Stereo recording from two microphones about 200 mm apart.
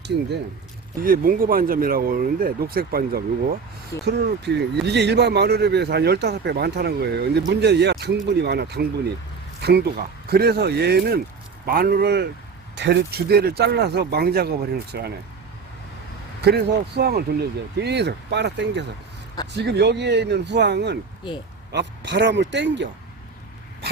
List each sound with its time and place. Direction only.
1.0 s speech: 45° right (ahead or behind)
16.4 s speech: 55° right (ahead or behind)